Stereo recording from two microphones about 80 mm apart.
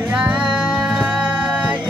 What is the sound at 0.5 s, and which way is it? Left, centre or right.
Music, centre.